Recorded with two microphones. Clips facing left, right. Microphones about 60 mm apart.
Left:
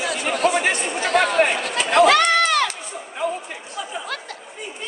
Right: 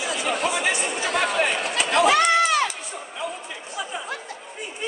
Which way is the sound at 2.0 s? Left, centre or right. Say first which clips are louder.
Left 2 dB; left.